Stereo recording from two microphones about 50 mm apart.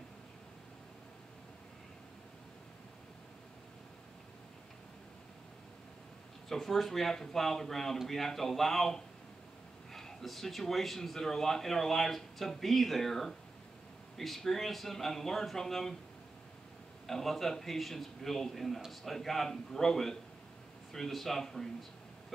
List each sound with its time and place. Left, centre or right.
6.5 s speech: centre
17.0 s a man's voice: centre